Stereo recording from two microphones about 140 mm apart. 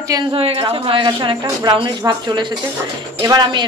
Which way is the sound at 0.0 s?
25° right (ahead or behind).